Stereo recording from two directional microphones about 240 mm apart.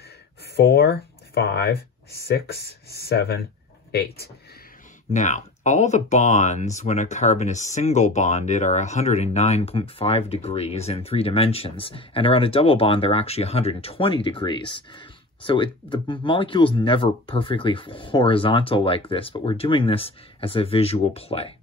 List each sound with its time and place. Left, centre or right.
0.6 s speech: left
5.1 s speech: left